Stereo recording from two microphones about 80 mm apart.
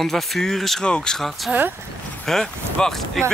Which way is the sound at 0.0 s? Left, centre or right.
Centre.